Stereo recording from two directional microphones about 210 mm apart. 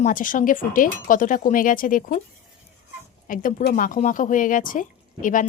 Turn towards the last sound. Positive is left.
turn(degrees=40)  # may be behind; listen again after turning